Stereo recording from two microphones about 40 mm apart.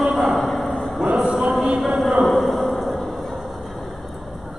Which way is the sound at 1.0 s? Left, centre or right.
Right.